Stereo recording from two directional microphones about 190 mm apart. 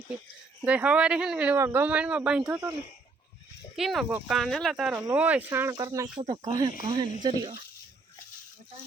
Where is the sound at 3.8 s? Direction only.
Centre (ahead or behind); by 7.5 s 25° right (ahead or behind).